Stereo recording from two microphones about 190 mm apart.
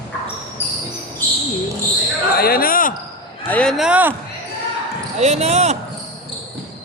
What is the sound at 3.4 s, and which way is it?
Speech, 5° left (ahead or behind).